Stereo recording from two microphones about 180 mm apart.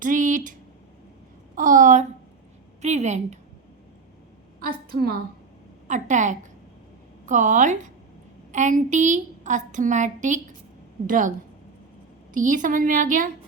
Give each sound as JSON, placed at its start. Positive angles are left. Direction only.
{"t": 0.0, "sound": "speech", "side_deg": -45}
{"t": 1.5, "sound": "a sound", "side_deg": -50}
{"t": 2.8, "sound": "a woman's voice", "side_deg": -40}
{"t": 4.9, "sound": "a woman's voice", "side_deg": -55}
{"t": 5.9, "sound": "a woman's voice", "side_deg": -45}